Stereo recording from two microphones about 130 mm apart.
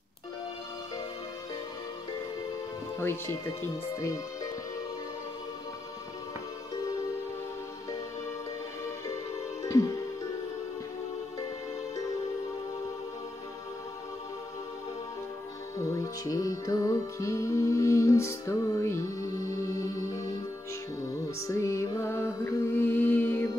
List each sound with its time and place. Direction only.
3.6 s speech: 25° left (ahead or behind)
9.6 s music: 25° left (ahead or behind)
15.8 s music: 25° left (ahead or behind)
21.4 s music: 25° left (ahead or behind)